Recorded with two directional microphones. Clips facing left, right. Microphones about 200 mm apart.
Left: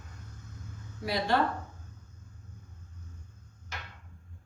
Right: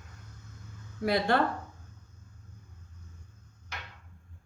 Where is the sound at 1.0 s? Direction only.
55° right (ahead or behind).